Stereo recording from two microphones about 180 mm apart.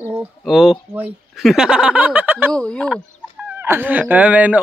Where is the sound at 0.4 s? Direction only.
5° right (ahead or behind).